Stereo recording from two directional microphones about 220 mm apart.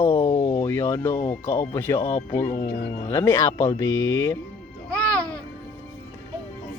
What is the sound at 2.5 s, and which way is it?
Speech, 40° left (ahead or behind).